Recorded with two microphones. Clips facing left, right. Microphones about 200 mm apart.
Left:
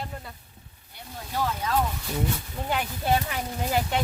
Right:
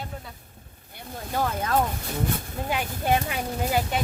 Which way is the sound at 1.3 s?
50° right (ahead or behind).